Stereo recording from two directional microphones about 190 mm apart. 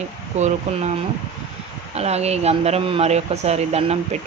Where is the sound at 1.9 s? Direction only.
35° right (ahead or behind).